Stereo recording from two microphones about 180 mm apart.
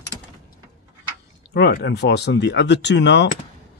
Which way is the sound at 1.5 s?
65° left (ahead or behind).